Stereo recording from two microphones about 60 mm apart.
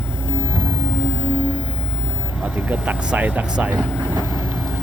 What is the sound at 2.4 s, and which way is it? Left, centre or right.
Speech, right.